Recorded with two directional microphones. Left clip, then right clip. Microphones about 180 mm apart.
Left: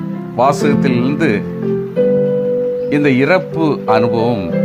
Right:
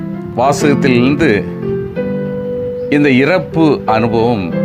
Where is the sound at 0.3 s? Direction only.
15° right (ahead or behind).